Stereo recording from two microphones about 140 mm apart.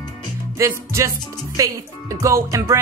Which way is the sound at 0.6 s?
20° right (ahead or behind).